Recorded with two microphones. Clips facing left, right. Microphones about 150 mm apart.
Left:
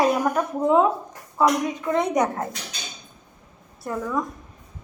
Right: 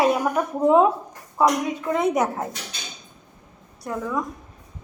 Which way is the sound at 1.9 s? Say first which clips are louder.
Even; 5° right (ahead or behind).